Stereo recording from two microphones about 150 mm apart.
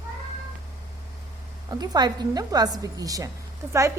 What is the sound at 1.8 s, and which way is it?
A woman's voice, 25° right (ahead or behind).